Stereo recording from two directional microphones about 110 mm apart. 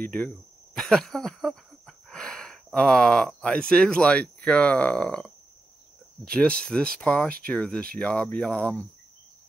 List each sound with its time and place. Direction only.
0.0 s speech: 15° left (ahead or behind)
6.3 s speech: 10° left (ahead or behind)